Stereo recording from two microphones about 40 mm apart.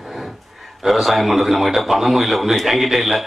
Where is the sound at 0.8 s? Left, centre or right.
Centre.